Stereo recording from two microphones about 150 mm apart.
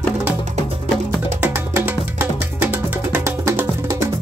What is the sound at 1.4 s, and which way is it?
Music, 15° right (ahead or behind).